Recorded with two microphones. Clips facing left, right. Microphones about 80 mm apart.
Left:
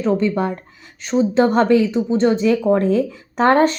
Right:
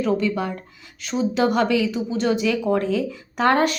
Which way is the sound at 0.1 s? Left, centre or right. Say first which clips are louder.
Left 4 dB; left.